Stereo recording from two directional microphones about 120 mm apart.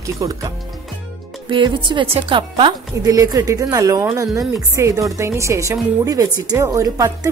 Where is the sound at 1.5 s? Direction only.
40° right (ahead or behind).